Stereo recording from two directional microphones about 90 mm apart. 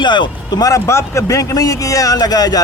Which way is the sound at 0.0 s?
55° left (ahead or behind).